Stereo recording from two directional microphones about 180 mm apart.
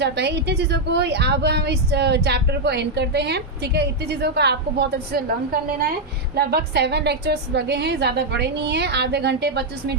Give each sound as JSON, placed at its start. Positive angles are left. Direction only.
{"t": 0.0, "sound": "a woman's voice", "side_deg": -70}
{"t": 6.3, "sound": "a woman's voice", "side_deg": -60}